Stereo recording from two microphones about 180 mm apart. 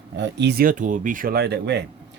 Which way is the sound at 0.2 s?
70° right (ahead or behind).